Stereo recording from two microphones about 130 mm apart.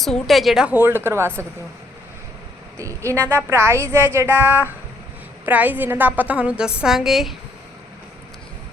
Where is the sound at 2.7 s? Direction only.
25° right (ahead or behind).